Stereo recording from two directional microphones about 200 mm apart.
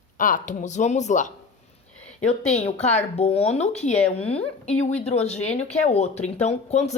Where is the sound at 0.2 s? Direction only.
40° left (ahead or behind).